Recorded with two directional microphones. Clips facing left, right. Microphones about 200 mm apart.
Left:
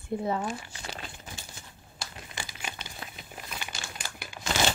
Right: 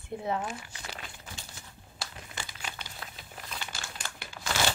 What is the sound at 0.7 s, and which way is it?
Crumpling, 30° left (ahead or behind).